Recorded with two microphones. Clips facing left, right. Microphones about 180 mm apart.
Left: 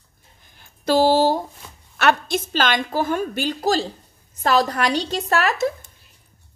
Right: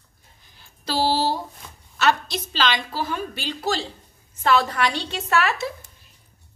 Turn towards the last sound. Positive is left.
turn(degrees=40)  # may be behind; listen again after turning